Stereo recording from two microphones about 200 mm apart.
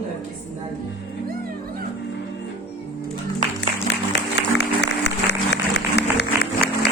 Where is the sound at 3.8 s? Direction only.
60° left (ahead or behind).